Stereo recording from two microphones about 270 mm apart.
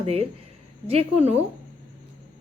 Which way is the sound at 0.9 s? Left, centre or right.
Right.